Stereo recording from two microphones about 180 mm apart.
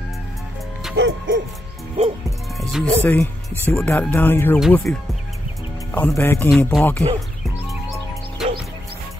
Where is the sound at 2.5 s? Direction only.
Centre (ahead or behind).